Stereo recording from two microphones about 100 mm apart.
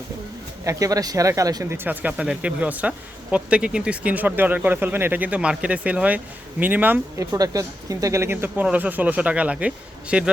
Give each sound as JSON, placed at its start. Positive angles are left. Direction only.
{"t": 0.6, "sound": "speech", "side_deg": -35}
{"t": 1.7, "sound": "speech", "side_deg": -20}
{"t": 7.3, "sound": "speech", "side_deg": -35}